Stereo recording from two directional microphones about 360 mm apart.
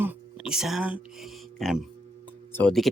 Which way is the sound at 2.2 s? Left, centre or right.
Centre.